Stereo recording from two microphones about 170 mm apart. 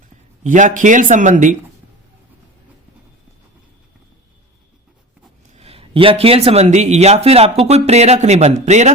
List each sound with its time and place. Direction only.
0.4 s speech: 50° right (ahead or behind)
5.5 s speech: 35° right (ahead or behind)